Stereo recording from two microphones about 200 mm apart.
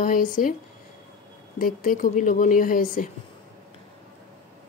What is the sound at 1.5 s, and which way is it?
Speech, 45° left (ahead or behind).